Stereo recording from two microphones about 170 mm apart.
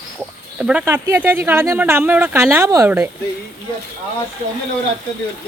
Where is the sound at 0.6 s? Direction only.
5° right (ahead or behind).